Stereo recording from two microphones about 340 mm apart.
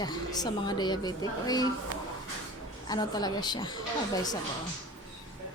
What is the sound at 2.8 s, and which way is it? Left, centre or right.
Speech, centre.